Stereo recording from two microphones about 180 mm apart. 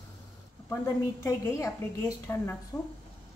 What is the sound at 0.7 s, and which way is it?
A woman's voice, 15° left (ahead or behind).